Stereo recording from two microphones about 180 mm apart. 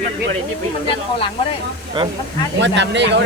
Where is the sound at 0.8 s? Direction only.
30° left (ahead or behind).